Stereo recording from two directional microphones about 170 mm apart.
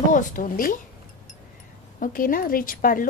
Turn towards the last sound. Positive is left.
turn(degrees=55)  # may be behind; listen again after turning